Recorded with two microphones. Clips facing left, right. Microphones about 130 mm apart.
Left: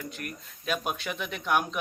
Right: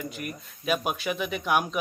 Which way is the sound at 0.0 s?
5° right (ahead or behind).